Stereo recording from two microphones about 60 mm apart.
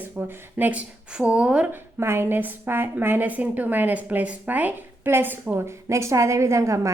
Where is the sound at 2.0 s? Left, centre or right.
Right.